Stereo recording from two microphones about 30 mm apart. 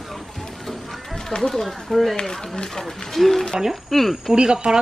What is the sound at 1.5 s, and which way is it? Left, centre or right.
Speech, centre.